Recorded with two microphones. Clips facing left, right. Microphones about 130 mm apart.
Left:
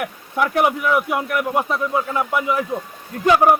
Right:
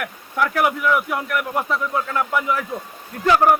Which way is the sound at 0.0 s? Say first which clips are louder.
Left 1 dB; 20° left (ahead or behind).